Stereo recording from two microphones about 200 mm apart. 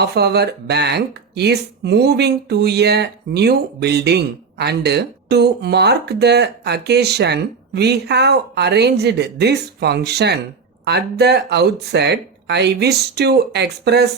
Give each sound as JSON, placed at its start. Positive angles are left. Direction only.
{"t": 0.0, "sound": "speech", "side_deg": -55}